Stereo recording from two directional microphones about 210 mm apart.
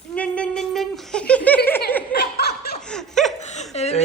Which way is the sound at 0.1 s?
5° left (ahead or behind).